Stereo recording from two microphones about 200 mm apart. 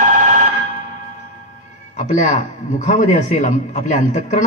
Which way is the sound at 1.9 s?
35° left (ahead or behind).